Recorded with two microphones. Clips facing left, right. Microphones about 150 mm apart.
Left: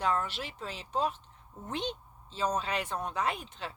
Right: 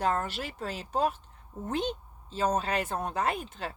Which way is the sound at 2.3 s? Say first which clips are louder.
Right 3 dB; 50° right (ahead or behind).